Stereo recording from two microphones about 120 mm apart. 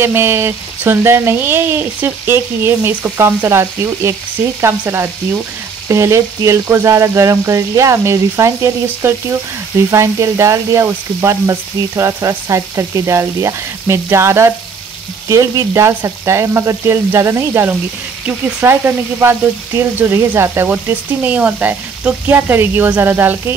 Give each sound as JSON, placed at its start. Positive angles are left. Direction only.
{"t": 0.0, "sound": "frying", "side_deg": -20}
{"t": 18.2, "sound": "speech", "side_deg": -15}